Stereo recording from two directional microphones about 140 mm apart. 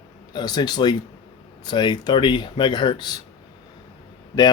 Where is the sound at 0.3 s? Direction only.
30° left (ahead or behind).